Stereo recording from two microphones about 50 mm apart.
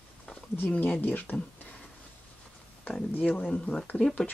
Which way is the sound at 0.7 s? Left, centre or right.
Left.